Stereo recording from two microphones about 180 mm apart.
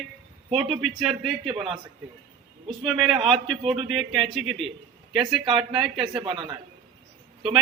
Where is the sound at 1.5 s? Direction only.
30° right (ahead or behind).